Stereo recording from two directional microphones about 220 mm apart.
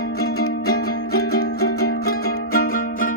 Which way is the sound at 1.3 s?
45° left (ahead or behind).